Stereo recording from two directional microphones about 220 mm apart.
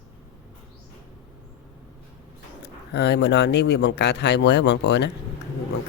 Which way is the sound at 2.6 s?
50° left (ahead or behind).